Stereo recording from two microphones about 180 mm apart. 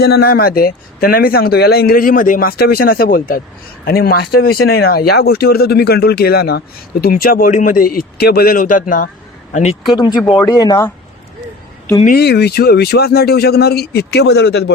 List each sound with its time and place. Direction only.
0.0 s a man's voice: 65° left (ahead or behind); by 9.7 s 40° left (ahead or behind)
9.9 s speech: 25° left (ahead or behind)
12.0 s speech: 60° left (ahead or behind)